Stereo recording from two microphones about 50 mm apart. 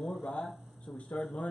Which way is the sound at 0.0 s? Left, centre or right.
Centre.